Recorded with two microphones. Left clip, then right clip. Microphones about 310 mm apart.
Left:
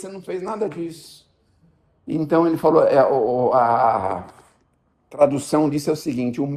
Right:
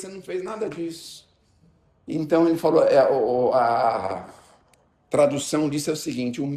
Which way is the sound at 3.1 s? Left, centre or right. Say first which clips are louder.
Left 2 dB; left.